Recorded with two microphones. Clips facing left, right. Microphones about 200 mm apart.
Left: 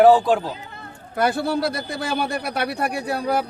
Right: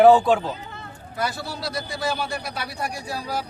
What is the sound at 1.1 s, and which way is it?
A man's voice, 55° left (ahead or behind).